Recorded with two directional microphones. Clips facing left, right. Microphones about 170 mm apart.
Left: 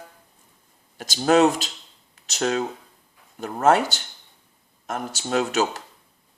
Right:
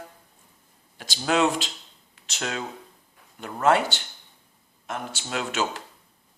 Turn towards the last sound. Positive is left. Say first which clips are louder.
# left 6 dB
turn(degrees=40)  # may be behind; listen again after turning